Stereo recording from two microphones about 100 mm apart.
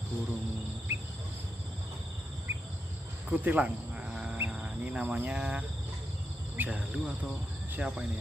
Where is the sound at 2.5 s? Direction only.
25° right (ahead or behind).